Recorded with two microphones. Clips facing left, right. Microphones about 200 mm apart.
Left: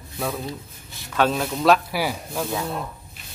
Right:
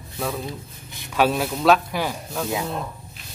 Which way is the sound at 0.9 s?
10° right (ahead or behind).